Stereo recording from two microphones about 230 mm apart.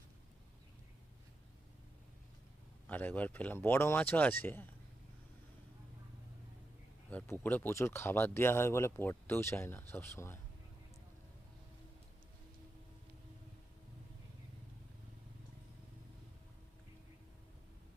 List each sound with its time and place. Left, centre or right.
2.8 s speech: centre
7.1 s speech: centre